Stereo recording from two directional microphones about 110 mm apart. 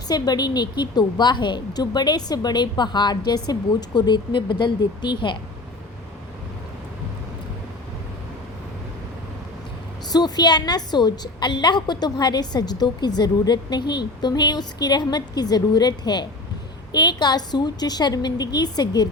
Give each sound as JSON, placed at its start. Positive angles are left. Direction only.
{"t": 0.1, "sound": "a woman's voice", "side_deg": 35}
{"t": 10.1, "sound": "a woman's voice", "side_deg": 40}